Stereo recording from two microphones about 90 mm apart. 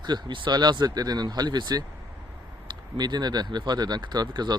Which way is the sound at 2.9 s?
50° right (ahead or behind).